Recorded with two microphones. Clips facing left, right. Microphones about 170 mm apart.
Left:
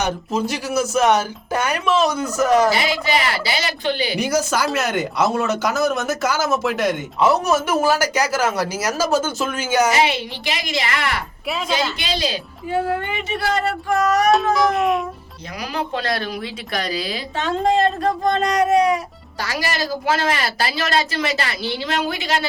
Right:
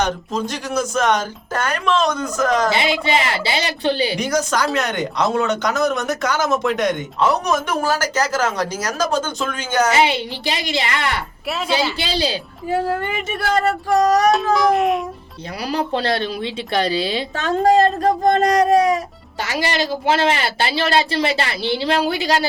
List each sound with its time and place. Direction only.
0.0 s speech: 10° left (ahead or behind)
2.7 s a woman's voice: 25° right (ahead or behind)
4.2 s speech: 5° left (ahead or behind)
9.9 s a woman's voice: 30° right (ahead or behind)
13.1 s speech: 45° right (ahead or behind)
14.5 s speech: centre (ahead or behind)
15.7 s a woman's voice: 30° right (ahead or behind)
17.7 s speech: 40° right (ahead or behind)
19.4 s a woman's voice: 25° right (ahead or behind)